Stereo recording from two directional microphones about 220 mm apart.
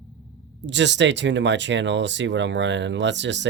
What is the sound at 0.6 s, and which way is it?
Speech, 55° right (ahead or behind).